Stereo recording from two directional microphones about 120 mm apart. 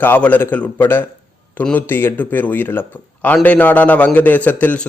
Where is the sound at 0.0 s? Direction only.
15° left (ahead or behind).